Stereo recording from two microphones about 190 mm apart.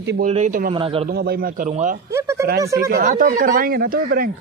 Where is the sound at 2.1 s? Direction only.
15° right (ahead or behind).